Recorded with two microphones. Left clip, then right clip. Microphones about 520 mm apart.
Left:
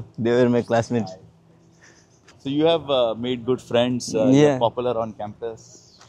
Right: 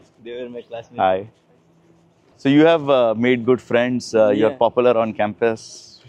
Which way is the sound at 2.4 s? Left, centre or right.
Right.